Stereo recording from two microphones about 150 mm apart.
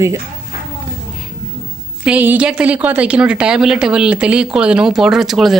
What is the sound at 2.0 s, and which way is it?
Speech, 10° right (ahead or behind).